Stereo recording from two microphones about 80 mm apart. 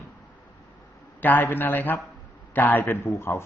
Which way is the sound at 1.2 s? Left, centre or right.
Left.